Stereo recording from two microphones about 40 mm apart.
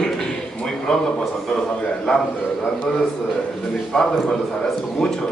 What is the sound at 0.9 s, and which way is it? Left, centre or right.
Speech, centre.